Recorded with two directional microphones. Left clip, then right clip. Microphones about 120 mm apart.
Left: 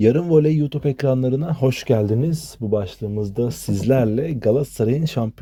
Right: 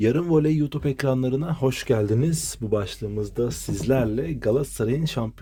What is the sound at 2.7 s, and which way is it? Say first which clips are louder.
Speech: left 3 dB; 15° left (ahead or behind).